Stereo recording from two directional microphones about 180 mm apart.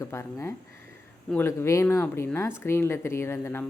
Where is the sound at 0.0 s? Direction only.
15° left (ahead or behind).